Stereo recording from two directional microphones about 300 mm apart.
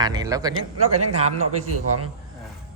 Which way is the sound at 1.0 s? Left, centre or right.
Right.